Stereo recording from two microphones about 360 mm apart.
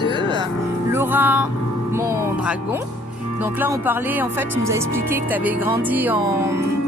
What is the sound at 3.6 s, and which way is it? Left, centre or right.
A woman's voice, centre.